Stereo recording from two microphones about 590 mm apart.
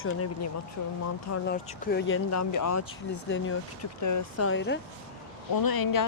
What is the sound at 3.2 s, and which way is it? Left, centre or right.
Speech, centre.